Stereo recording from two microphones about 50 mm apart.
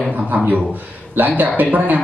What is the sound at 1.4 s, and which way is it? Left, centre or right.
Speech, right.